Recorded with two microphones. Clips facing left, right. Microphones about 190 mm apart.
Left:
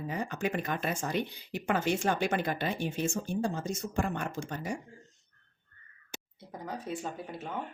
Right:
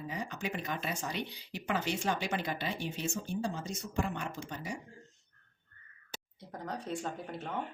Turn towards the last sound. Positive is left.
turn(degrees=5)  # may be behind; listen again after turning